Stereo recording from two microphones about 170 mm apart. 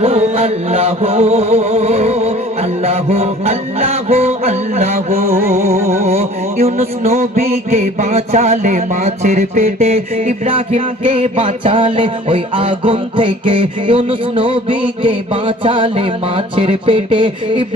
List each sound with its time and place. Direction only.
0.0 s music: 35° right (ahead or behind)